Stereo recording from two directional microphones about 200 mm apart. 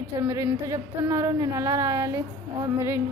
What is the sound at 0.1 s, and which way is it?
Speech, 15° right (ahead or behind).